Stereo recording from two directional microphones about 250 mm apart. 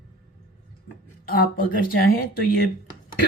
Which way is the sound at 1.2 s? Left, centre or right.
Left.